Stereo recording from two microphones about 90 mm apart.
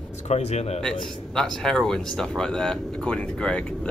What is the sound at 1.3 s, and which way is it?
Speech, 5° left (ahead or behind).